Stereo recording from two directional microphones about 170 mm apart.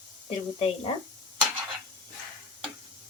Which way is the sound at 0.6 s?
35° left (ahead or behind).